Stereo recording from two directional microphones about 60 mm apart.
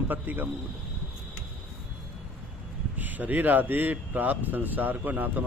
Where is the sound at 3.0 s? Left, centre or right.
Right.